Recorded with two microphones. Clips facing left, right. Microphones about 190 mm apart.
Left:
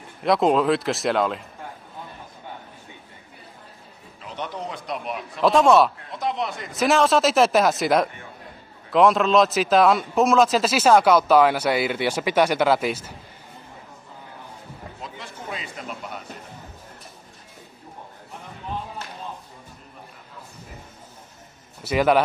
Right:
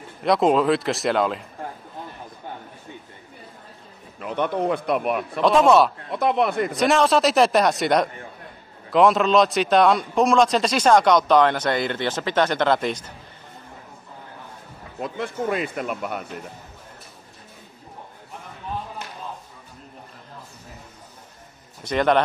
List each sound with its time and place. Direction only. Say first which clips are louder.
0.2 s speech: right 1 dB; centre (ahead or behind)
4.2 s speech: right 9 dB; 55° right (ahead or behind)
5.4 s speech: even; centre (ahead or behind)
6.1 s speech: right 9 dB; 60° right (ahead or behind)
6.7 s speech: left 3 dB; centre (ahead or behind)
15.0 s speech: right 14 dB; 55° right (ahead or behind)
21.8 s a man's voice: left 1 dB; 5° left (ahead or behind)